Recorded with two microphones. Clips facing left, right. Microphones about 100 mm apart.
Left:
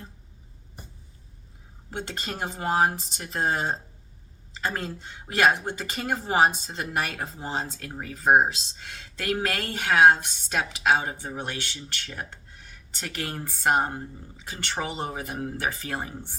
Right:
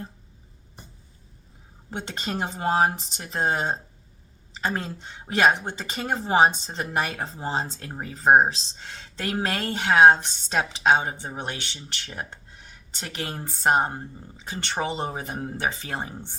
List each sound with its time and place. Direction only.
1.9 s speech: 20° right (ahead or behind)